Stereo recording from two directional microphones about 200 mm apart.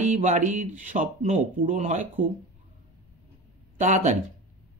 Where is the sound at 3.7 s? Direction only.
35° right (ahead or behind).